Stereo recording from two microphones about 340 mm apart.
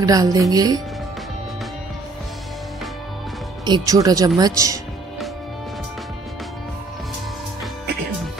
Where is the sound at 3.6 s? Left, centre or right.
Centre.